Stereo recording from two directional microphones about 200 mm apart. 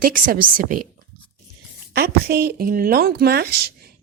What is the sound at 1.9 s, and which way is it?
A woman's voice, 50° right (ahead or behind).